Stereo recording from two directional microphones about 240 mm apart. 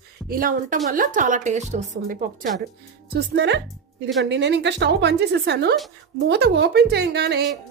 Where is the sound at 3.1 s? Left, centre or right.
Right.